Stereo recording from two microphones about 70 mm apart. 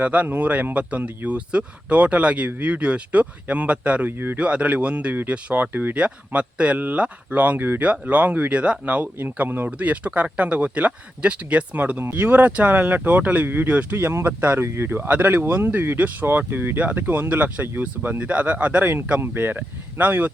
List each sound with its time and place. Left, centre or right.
0.0 s speech: centre
13.9 s speech: right; by 18.9 s centre
19.2 s speech: right